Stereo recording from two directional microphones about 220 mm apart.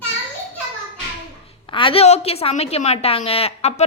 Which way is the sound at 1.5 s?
25° left (ahead or behind).